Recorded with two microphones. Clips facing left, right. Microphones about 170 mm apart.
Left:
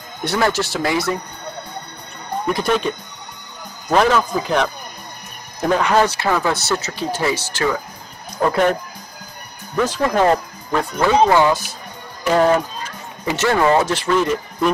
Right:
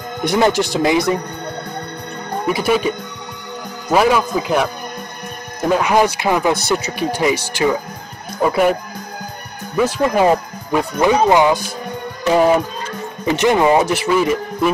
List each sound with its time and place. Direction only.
0.2 s speech: 15° right (ahead or behind)
2.4 s speech: 5° right (ahead or behind)
3.9 s speech: 10° right (ahead or behind)
5.7 s speech: 10° right (ahead or behind)
9.8 s speech: 10° right (ahead or behind)